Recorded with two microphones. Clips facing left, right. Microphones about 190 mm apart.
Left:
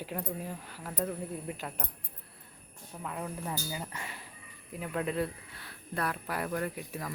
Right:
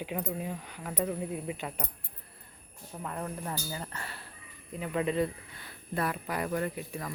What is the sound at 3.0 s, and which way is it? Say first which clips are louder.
Speech: right 1 dB; 5° left (ahead or behind).